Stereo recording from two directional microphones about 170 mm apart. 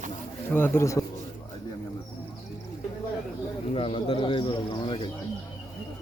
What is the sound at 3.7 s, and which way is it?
Speech, 35° left (ahead or behind).